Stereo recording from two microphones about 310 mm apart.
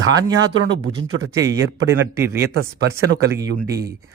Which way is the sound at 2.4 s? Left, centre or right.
Right.